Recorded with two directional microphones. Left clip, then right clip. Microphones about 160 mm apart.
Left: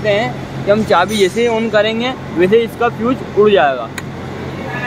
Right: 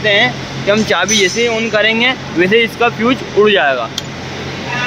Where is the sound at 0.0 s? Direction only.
Centre (ahead or behind).